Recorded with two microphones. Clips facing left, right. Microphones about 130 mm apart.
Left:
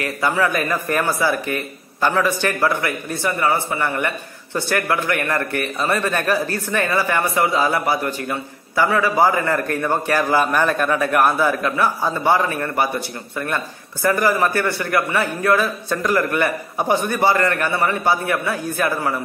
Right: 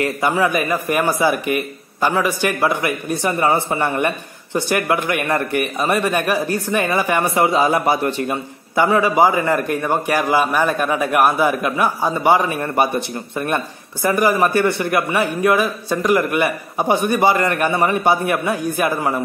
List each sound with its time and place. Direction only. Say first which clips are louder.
0.0 s a man's voice: right 2 dB; 20° right (ahead or behind)